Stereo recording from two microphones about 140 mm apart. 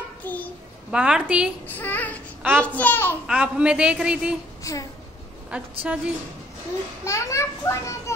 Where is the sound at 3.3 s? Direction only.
5° right (ahead or behind).